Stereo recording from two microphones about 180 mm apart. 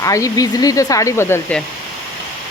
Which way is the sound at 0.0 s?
20° left (ahead or behind).